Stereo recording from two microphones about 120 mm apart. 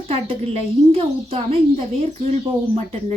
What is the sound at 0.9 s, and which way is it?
Speech, 55° right (ahead or behind).